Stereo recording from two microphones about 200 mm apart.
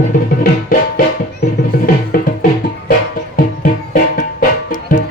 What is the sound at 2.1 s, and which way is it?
Music, 45° left (ahead or behind).